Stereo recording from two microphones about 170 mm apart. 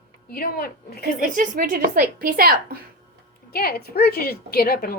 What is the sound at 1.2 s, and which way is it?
A woman's voice, 55° right (ahead or behind).